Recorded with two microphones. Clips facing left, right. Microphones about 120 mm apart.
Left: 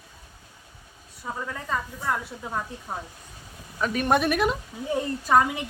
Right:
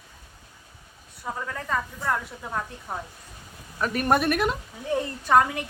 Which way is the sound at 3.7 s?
5° right (ahead or behind).